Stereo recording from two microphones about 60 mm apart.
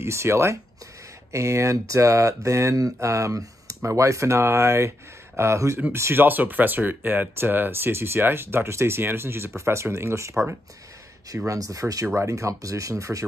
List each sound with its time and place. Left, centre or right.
0.0 s speech: right
6.2 s speech: right
11.4 s speech: right